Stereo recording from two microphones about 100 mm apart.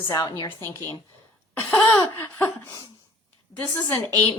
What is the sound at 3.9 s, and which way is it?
Speech, 20° left (ahead or behind).